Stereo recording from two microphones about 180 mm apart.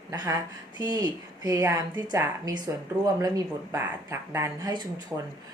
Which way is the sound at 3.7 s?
15° right (ahead or behind).